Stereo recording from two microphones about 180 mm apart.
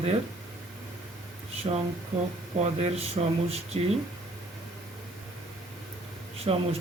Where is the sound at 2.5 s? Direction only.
35° right (ahead or behind).